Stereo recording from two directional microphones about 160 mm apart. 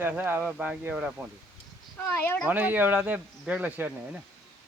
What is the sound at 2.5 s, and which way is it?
Speech, 10° right (ahead or behind).